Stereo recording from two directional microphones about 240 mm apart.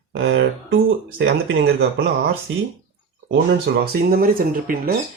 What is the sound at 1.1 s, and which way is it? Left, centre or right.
Speech, right.